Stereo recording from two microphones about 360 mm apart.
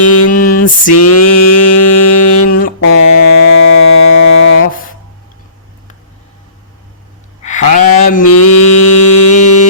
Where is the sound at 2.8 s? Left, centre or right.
Left.